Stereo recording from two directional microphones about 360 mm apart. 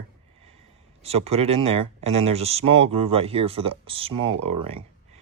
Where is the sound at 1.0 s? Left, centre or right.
Centre.